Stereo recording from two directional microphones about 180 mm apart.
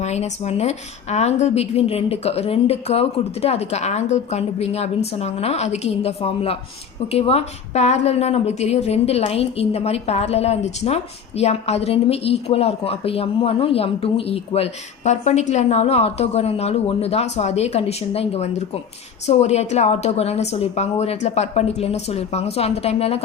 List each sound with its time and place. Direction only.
0.0 s a woman's voice: 35° left (ahead or behind)